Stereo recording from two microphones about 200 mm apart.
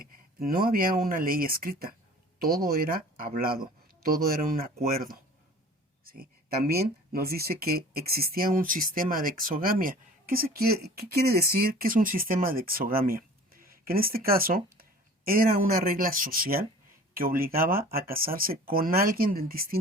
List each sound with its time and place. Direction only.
0.0 s speech: 45° right (ahead or behind)
6.7 s speech: 50° right (ahead or behind)